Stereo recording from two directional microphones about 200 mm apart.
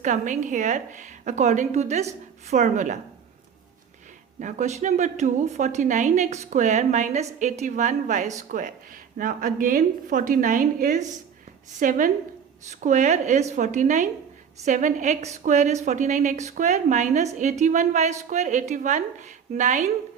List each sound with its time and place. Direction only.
0.0 s a woman's voice: 40° right (ahead or behind)
4.4 s a woman's voice: 35° right (ahead or behind)